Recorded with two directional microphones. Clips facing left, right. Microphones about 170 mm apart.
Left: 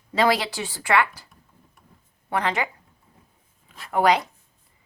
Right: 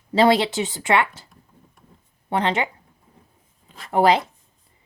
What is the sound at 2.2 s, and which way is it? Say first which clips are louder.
Speech: right 3 dB; 25° right (ahead or behind).